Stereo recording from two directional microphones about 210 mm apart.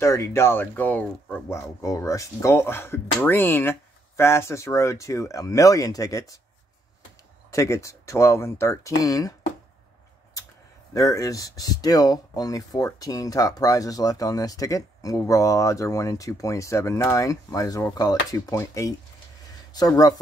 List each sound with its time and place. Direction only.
0.0 s speech: 15° left (ahead or behind)
7.5 s speech: 15° left (ahead or behind)
10.9 s speech: 15° left (ahead or behind)